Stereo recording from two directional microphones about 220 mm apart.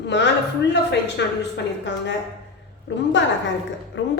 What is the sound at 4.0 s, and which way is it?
Speech, 55° left (ahead or behind).